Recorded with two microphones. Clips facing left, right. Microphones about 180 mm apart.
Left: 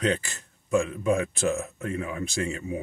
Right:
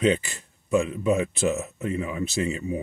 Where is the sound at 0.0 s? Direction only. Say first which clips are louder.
Right 4 dB; 5° right (ahead or behind).